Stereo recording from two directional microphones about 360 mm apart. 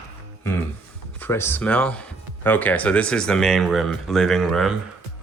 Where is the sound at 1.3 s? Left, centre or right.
Centre.